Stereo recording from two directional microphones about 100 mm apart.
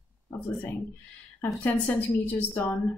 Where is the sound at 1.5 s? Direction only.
15° left (ahead or behind).